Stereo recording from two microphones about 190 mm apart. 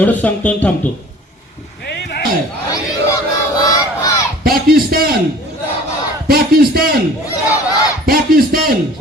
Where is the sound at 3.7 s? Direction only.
20° left (ahead or behind).